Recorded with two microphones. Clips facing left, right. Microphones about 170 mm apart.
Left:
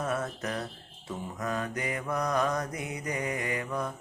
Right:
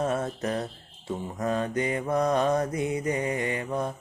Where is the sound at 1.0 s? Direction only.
30° right (ahead or behind).